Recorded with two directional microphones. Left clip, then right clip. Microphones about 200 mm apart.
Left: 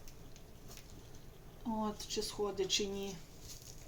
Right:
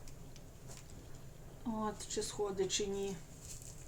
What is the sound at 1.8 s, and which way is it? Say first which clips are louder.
Speech: even; 15° left (ahead or behind).